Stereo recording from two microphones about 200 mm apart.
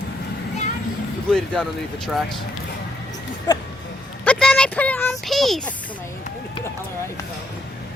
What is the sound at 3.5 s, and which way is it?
Speech, 20° left (ahead or behind).